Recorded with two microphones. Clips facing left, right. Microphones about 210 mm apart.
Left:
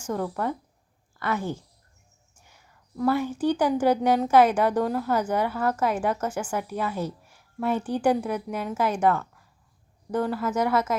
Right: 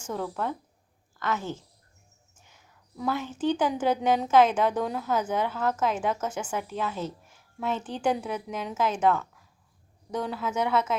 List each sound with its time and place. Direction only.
0.1 s a woman's voice: 10° left (ahead or behind)
3.0 s a woman's voice: 10° left (ahead or behind)